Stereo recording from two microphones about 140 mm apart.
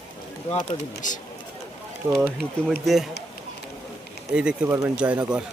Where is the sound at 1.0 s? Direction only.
65° left (ahead or behind).